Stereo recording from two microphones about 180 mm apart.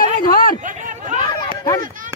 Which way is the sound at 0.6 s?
45° right (ahead or behind).